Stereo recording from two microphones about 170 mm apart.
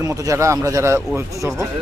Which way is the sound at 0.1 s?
15° right (ahead or behind).